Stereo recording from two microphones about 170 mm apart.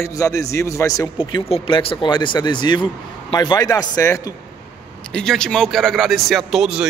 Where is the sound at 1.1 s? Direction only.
30° left (ahead or behind).